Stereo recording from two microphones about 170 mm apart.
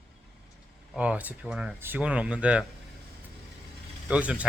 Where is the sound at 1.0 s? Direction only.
10° right (ahead or behind).